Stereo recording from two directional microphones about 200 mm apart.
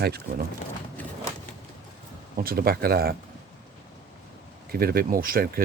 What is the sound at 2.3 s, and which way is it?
Speech, 50° right (ahead or behind).